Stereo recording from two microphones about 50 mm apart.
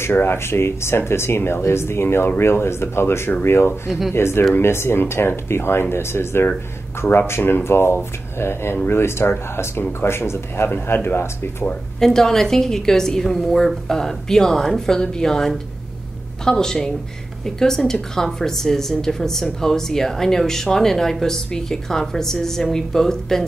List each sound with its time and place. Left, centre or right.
0.0 s speech: left
12.0 s speech: centre